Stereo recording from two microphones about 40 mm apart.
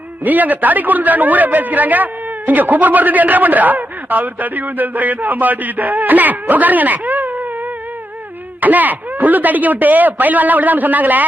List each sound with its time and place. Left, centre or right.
0.3 s a man's voice: right
8.6 s a man's voice: right